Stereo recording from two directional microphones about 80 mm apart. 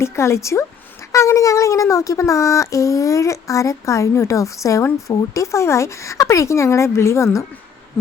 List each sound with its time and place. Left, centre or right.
0.0 s speech: left